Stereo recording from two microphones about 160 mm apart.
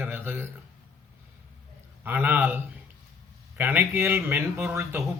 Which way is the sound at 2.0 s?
10° right (ahead or behind).